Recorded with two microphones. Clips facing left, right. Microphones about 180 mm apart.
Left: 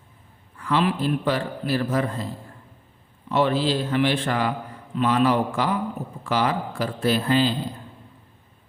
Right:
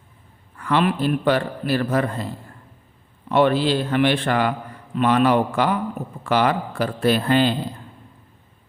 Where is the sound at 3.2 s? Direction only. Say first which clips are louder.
Right 4 dB; 60° right (ahead or behind).